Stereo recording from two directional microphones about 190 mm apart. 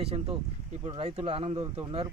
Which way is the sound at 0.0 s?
30° right (ahead or behind).